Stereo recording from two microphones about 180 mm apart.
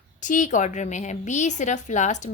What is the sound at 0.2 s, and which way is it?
A woman's voice, 45° left (ahead or behind).